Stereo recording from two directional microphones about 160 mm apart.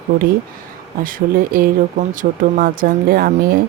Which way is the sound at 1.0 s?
60° right (ahead or behind).